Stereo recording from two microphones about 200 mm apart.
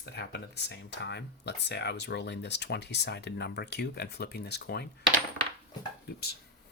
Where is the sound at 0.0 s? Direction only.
55° left (ahead or behind).